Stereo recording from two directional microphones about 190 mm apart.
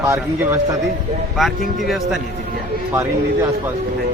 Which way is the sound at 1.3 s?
Centre (ahead or behind).